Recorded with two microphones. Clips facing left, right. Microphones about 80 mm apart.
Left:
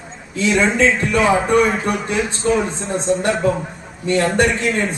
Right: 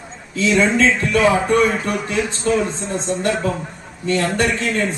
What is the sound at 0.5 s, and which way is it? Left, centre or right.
Speech, centre.